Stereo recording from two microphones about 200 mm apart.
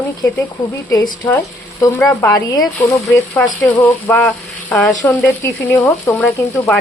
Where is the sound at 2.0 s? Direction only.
15° left (ahead or behind).